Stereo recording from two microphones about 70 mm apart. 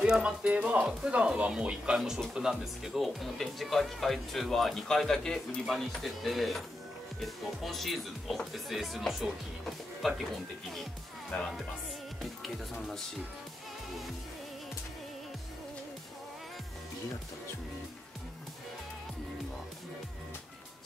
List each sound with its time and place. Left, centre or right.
0.0 s speech: centre
11.3 s speech: centre
12.7 s speech: centre